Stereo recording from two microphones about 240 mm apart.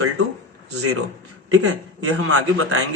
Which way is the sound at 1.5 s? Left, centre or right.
Right.